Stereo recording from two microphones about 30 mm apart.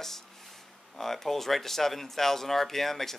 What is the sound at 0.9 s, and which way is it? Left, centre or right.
Speech, centre.